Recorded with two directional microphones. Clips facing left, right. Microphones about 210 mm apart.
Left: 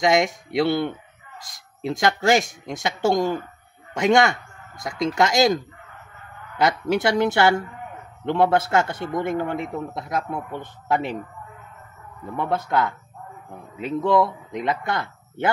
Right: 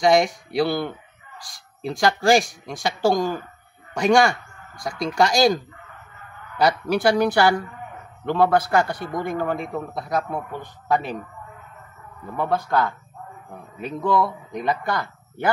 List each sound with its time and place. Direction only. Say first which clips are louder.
0.0 s a man's voice: right 2 dB; 20° left (ahead or behind)
6.9 s a man's voice: right 1 dB; 20° left (ahead or behind)
12.4 s a man's voice: right 1 dB; 20° left (ahead or behind)